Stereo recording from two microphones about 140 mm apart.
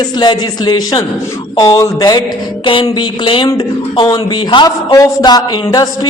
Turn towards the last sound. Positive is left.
turn(degrees=25)  # may be behind; listen again after turning